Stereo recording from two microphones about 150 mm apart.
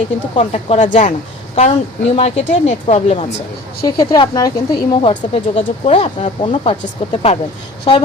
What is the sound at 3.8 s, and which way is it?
Speech, 30° left (ahead or behind).